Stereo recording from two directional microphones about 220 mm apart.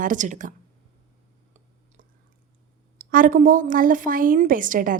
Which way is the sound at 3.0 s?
40° right (ahead or behind).